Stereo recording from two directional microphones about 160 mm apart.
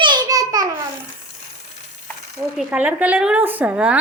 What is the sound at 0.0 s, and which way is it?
Babbling, 25° right (ahead or behind).